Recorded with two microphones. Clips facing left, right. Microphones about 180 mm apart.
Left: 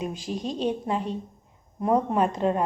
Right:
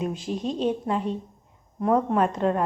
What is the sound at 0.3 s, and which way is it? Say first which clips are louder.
Speech: right 1 dB; centre (ahead or behind).